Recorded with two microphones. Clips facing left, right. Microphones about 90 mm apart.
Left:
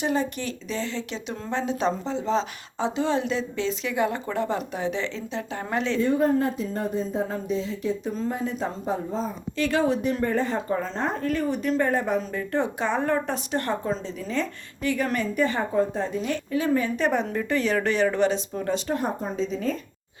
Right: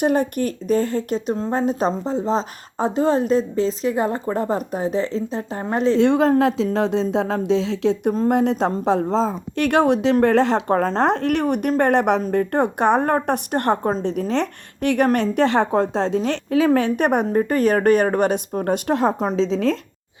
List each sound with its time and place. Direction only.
0.0 s speech: 55° right (ahead or behind); by 6.0 s 40° right (ahead or behind)
6.0 s speech: 85° right
8.1 s a woman's voice: 60° right (ahead or behind)
12.2 s speech: 55° right (ahead or behind); by 16.2 s 90° right
16.2 s a woman's voice: 75° right (ahead or behind); by 17.2 s 55° right (ahead or behind)
17.2 s speech: 45° right (ahead or behind); by 19.8 s 90° right